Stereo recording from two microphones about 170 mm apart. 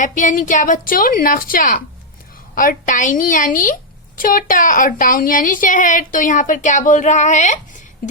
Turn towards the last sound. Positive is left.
turn(degrees=50)  # may be behind; listen again after turning